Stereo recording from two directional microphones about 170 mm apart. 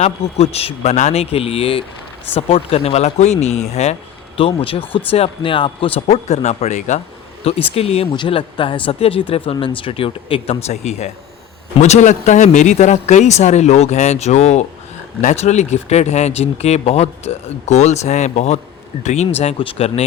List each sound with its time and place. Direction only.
0.0 s speech: 35° left (ahead or behind)